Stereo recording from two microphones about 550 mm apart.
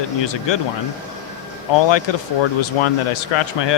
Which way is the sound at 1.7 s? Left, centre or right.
Left.